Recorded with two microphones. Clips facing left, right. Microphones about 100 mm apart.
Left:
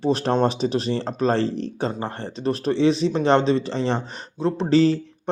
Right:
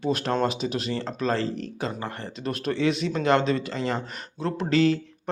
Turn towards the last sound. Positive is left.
turn(degrees=30)  # may be behind; listen again after turning